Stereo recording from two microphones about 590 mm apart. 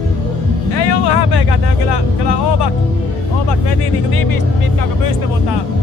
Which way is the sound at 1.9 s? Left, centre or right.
Left.